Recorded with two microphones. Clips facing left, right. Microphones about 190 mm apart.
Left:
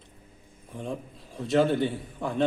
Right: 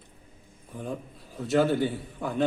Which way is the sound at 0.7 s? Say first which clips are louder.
Even; 5° right (ahead or behind).